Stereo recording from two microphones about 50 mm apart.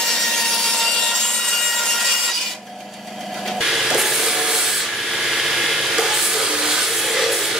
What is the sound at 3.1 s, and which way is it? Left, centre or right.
Wood, centre.